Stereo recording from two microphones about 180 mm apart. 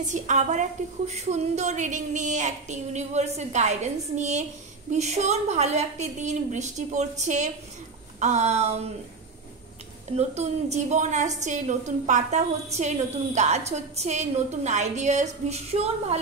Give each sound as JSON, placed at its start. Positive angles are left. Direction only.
{"t": 0.0, "sound": "a woman's voice", "side_deg": -40}
{"t": 10.1, "sound": "a woman's voice", "side_deg": -40}